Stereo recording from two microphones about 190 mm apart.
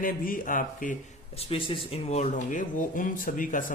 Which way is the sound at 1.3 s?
30° left (ahead or behind).